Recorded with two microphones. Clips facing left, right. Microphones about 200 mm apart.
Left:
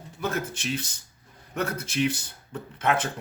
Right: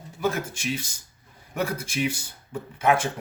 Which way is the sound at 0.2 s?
10° right (ahead or behind).